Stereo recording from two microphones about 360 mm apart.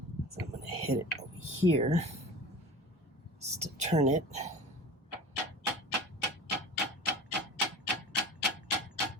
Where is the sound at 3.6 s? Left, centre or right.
Centre.